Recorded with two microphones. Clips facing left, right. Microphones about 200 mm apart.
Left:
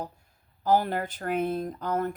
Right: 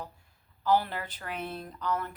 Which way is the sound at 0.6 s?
45° left (ahead or behind).